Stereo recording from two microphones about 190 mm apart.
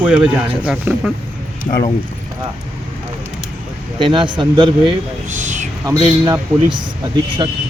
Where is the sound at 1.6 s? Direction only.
50° left (ahead or behind).